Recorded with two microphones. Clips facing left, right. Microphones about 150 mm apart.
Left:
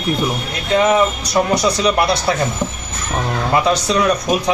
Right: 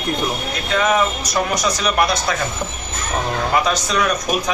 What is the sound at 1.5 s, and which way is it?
Speech, 30° left (ahead or behind).